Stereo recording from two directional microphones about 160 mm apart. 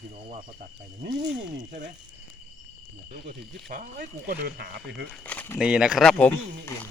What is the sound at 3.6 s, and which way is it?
Speech, 55° right (ahead or behind).